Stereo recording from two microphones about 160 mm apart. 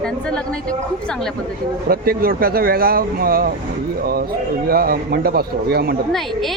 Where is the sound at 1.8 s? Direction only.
70° right (ahead or behind).